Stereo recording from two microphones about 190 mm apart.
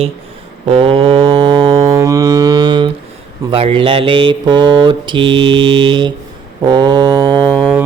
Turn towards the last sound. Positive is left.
turn(degrees=-25)  # may be behind; listen again after turning